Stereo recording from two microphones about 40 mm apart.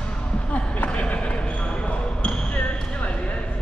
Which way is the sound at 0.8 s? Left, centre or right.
Left.